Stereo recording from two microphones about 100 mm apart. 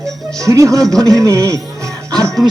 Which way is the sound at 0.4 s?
30° right (ahead or behind).